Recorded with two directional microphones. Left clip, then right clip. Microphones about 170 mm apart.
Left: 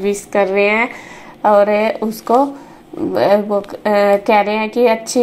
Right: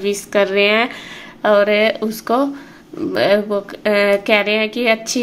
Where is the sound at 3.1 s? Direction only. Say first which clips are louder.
Left 2 dB; 5° right (ahead or behind).